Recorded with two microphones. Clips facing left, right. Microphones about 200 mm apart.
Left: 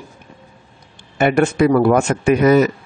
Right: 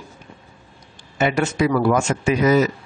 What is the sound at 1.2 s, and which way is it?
Speech, 55° left (ahead or behind).